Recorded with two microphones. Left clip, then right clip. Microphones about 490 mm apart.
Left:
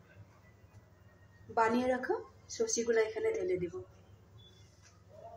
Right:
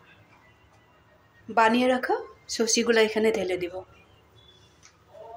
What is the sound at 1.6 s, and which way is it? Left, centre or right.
Speech, left.